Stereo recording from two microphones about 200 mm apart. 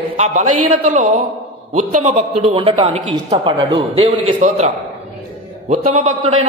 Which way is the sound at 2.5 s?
25° right (ahead or behind).